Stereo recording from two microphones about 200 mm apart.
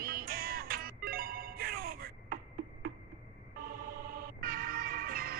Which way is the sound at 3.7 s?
45° right (ahead or behind).